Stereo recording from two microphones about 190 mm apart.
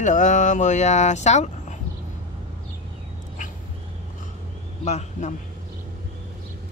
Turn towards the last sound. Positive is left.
turn(degrees=35)  # may be behind; listen again after turning